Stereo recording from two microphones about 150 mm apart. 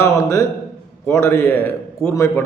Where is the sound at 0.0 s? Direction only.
20° left (ahead or behind).